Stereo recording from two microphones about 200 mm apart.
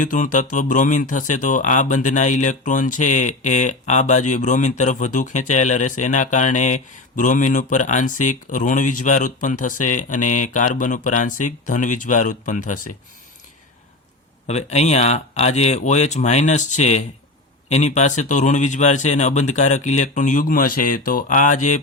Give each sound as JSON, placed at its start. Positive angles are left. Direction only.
{"t": 0.0, "sound": "speech", "side_deg": 40}
{"t": 14.4, "sound": "speech", "side_deg": 35}